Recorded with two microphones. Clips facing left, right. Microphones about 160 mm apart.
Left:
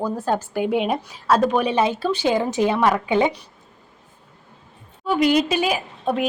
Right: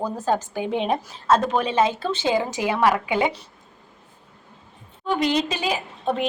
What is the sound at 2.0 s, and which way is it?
A woman's voice, 20° right (ahead or behind).